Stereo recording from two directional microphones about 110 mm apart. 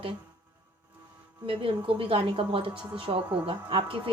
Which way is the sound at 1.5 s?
55° right (ahead or behind).